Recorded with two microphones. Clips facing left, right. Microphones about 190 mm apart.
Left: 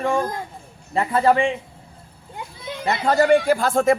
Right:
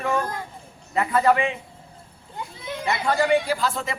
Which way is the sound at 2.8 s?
40° left (ahead or behind).